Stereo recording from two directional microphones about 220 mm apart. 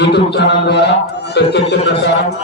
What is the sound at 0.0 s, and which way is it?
A man's voice, 50° left (ahead or behind).